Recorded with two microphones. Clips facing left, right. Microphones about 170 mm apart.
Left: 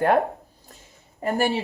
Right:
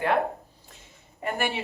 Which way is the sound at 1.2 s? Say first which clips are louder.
Left 6 dB; 35° left (ahead or behind).